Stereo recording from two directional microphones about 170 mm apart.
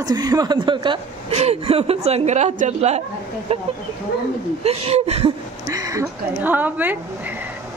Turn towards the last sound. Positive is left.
turn(degrees=-10)  # may be behind; listen again after turning